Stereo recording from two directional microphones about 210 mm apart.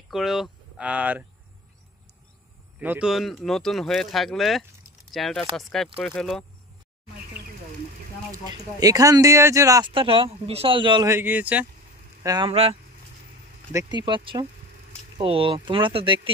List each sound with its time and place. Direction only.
0.1 s speech: centre (ahead or behind)
2.8 s speech: 5° right (ahead or behind)
8.3 s speech: 15° right (ahead or behind)
12.2 s speech: 20° right (ahead or behind)